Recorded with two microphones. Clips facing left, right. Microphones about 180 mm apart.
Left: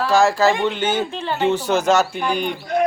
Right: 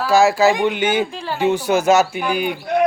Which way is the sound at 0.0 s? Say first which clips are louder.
Right 2 dB; 10° right (ahead or behind).